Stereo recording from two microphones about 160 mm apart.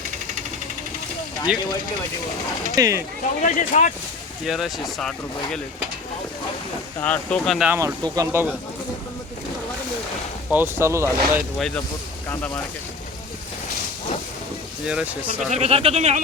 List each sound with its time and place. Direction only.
1.5 s speech: 5° right (ahead or behind)
2.7 s speech: 20° right (ahead or behind)
3.4 s speech: 50° left (ahead or behind)
4.4 s speech: centre (ahead or behind)
7.0 s speech: 5° left (ahead or behind)
7.7 s speech: 15° right (ahead or behind)
10.5 s speech: 15° right (ahead or behind)
12.3 s speech: 10° left (ahead or behind)
14.8 s speech: 10° right (ahead or behind)
15.4 s speech: 40° right (ahead or behind)